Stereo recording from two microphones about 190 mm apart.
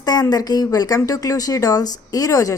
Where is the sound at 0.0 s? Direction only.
20° left (ahead or behind).